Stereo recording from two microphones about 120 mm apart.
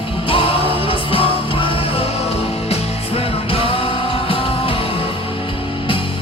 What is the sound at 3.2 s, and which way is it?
Music, 50° left (ahead or behind).